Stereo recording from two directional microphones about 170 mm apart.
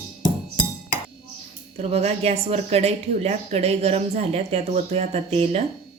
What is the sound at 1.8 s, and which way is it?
Speech, 40° right (ahead or behind).